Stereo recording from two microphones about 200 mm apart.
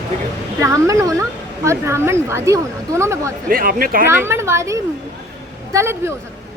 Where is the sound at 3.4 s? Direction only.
45° right (ahead or behind).